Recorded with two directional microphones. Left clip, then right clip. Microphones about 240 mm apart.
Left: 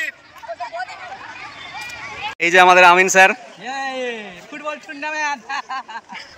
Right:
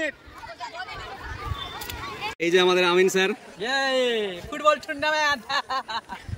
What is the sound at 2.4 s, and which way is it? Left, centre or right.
Speech, centre.